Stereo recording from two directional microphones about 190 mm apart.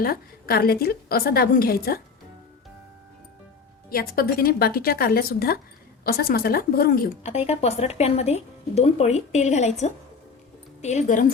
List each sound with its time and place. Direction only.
0.0 s a woman's voice: 50° left (ahead or behind)
3.8 s a woman's voice: 50° left (ahead or behind)
7.2 s speech: 35° left (ahead or behind)